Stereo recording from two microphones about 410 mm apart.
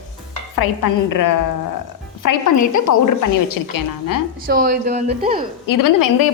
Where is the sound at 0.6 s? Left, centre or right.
Left.